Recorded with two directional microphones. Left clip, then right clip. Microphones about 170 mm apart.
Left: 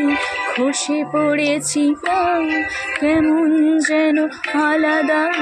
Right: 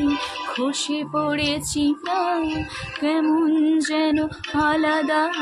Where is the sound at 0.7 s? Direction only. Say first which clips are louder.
Left 5 dB; 25° left (ahead or behind).